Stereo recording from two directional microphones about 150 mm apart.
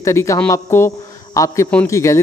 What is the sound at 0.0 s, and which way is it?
A man's voice, 20° left (ahead or behind).